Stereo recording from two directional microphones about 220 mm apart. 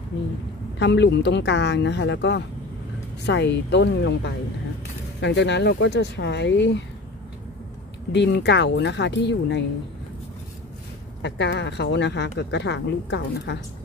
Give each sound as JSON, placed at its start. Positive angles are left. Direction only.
{"t": 0.7, "sound": "speech", "side_deg": 50}
{"t": 8.1, "sound": "speech", "side_deg": 50}
{"t": 11.2, "sound": "speech", "side_deg": 50}